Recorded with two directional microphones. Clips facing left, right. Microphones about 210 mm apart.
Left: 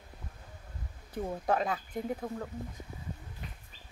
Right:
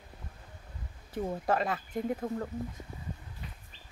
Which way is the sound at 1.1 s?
Centre (ahead or behind).